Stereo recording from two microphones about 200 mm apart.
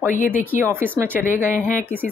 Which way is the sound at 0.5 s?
10° right (ahead or behind).